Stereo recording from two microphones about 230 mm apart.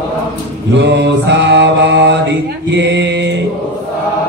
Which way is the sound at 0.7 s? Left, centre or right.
Right.